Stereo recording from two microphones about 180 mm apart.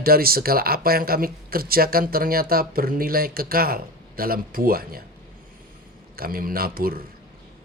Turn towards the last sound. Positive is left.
turn(degrees=-55)  # may be behind; listen again after turning